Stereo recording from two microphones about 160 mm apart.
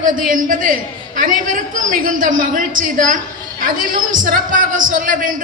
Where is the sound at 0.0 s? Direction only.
55° right (ahead or behind).